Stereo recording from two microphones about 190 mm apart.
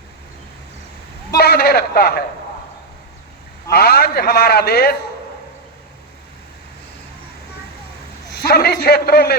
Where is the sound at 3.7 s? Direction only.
55° left (ahead or behind).